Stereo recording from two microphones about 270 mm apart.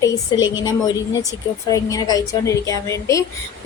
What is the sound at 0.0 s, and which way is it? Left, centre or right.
A woman's voice, centre.